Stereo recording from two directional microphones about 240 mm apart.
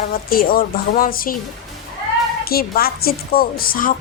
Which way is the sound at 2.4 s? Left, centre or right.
Left.